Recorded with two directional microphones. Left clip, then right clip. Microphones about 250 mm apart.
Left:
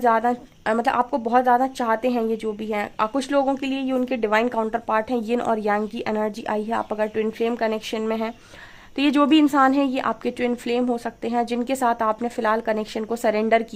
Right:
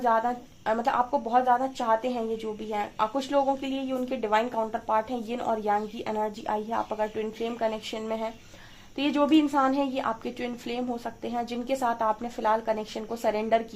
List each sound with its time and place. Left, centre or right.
0.0 s a woman's voice: left